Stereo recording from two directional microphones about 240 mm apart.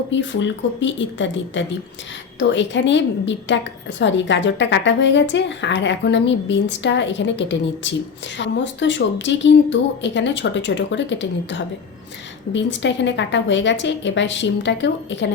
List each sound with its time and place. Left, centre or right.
0.1 s a woman's voice: left